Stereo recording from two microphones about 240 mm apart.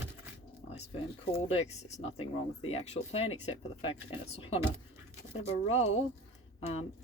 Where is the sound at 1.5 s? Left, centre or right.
Left.